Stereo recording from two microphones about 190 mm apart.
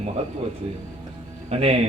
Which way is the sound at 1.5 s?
30° right (ahead or behind).